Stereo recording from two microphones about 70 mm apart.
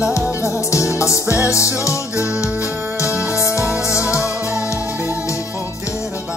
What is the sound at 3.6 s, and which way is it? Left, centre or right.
Music, centre.